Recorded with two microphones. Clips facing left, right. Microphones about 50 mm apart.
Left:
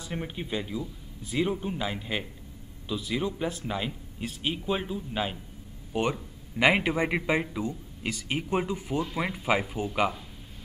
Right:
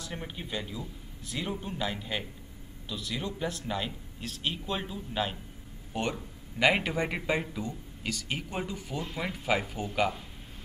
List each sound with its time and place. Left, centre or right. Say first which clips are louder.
0.0 s speech: left 4 dB; centre